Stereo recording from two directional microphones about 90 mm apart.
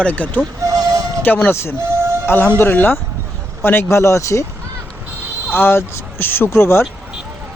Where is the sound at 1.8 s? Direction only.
30° right (ahead or behind).